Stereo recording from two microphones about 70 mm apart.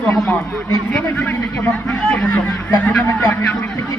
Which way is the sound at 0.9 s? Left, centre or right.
Left.